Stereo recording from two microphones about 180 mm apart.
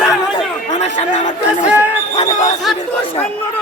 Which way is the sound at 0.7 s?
40° left (ahead or behind).